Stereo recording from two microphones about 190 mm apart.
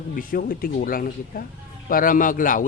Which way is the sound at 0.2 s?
45° left (ahead or behind).